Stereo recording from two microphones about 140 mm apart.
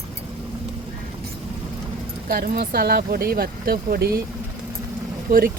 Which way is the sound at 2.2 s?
90° right.